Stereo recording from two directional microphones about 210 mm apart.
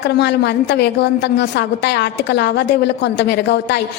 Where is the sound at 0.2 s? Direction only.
55° left (ahead or behind).